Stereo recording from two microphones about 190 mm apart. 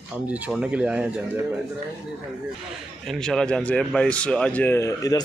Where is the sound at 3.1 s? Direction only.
5° left (ahead or behind).